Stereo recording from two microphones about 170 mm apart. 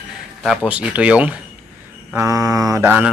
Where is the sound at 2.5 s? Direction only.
20° right (ahead or behind).